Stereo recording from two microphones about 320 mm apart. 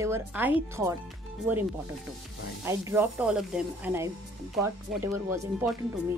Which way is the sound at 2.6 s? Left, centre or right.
Centre.